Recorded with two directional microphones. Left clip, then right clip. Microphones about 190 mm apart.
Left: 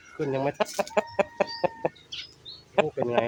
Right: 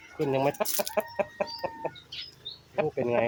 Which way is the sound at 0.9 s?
55° left (ahead or behind).